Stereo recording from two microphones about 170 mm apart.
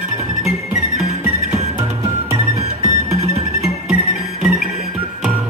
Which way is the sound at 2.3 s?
40° right (ahead or behind).